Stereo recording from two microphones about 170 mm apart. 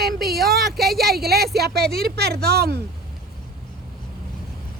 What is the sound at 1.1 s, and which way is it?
Speech, 65° right (ahead or behind).